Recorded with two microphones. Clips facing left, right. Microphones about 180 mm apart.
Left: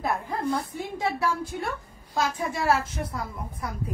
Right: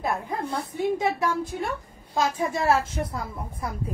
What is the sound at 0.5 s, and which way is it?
A woman's voice, 25° right (ahead or behind).